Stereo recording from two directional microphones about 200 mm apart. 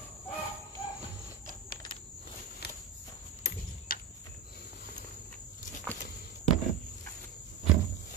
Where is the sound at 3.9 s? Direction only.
45° left (ahead or behind).